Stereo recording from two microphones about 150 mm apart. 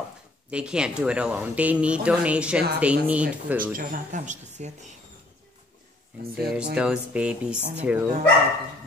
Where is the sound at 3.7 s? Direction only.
60° right (ahead or behind).